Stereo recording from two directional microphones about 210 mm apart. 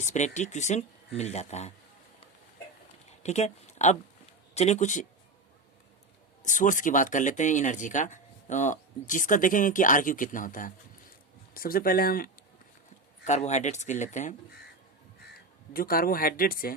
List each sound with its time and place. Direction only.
0.0 s speech: 35° left (ahead or behind)
3.1 s a sound: 30° left (ahead or behind)
4.5 s speech: 30° left (ahead or behind)
6.4 s speech: 35° left (ahead or behind)
13.2 s speech: 35° left (ahead or behind)
15.7 s speech: 45° left (ahead or behind)